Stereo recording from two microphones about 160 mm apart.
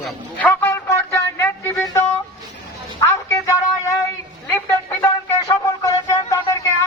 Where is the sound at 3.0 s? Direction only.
15° left (ahead or behind).